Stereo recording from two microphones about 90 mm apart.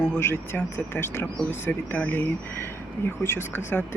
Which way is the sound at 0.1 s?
25° left (ahead or behind).